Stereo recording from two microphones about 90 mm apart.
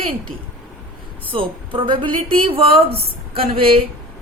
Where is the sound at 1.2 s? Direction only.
75° right (ahead or behind).